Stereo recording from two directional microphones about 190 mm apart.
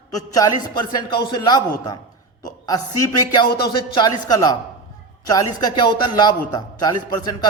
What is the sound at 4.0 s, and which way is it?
A man's voice, 20° left (ahead or behind).